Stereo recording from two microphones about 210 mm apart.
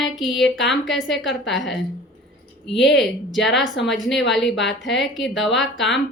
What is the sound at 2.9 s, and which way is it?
Speech, centre (ahead or behind).